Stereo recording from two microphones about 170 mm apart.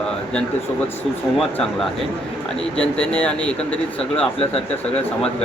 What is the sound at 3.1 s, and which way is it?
Speech, 10° left (ahead or behind).